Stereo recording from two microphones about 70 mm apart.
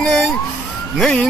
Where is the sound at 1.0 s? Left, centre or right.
Centre.